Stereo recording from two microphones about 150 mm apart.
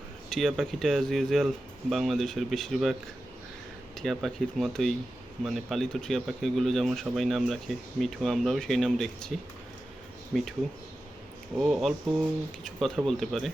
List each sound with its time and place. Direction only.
0.3 s speech: 5° left (ahead or behind)
3.9 s speech: centre (ahead or behind)
10.3 s speech: 5° right (ahead or behind)
11.5 s speech: 5° right (ahead or behind)